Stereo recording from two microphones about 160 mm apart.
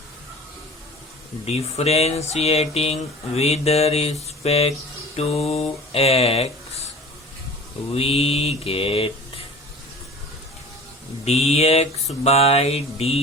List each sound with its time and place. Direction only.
1.5 s speech: 40° left (ahead or behind)
7.9 s speech: 40° left (ahead or behind)
11.3 s speech: 40° left (ahead or behind)